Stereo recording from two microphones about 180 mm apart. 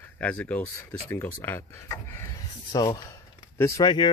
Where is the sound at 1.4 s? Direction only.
15° left (ahead or behind).